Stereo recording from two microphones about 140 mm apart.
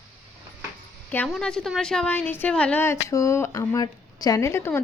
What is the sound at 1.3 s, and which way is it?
A woman's voice, 5° left (ahead or behind).